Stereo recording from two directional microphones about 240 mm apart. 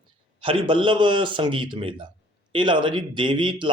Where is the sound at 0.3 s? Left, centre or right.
Right.